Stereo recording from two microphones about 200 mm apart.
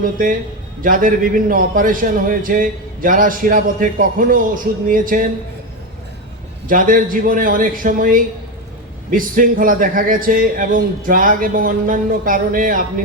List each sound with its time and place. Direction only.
0.0 s a man's voice: 45° right (ahead or behind)
6.7 s a man's voice: 45° right (ahead or behind)